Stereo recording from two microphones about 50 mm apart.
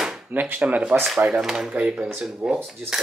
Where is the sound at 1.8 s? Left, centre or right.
Right.